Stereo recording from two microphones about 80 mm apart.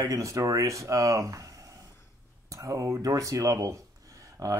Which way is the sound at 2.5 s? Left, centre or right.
Right.